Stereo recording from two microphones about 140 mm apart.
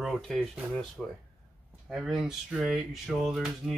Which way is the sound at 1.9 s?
5° right (ahead or behind).